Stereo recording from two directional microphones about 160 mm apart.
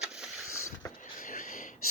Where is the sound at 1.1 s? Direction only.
55° left (ahead or behind).